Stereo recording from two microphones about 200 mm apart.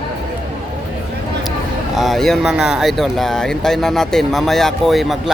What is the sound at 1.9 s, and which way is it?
Speech, centre (ahead or behind).